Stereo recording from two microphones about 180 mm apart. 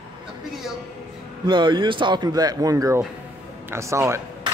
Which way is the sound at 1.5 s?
25° right (ahead or behind).